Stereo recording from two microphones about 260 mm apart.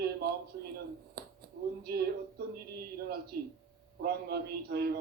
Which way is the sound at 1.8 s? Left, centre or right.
Right.